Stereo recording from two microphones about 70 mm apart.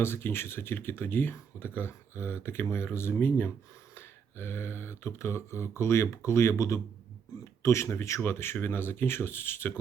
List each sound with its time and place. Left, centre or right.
0.0 s speech: left